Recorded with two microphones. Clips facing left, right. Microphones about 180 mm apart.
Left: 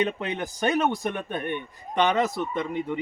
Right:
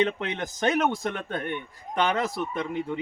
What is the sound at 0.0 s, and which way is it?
Speech, 10° left (ahead or behind).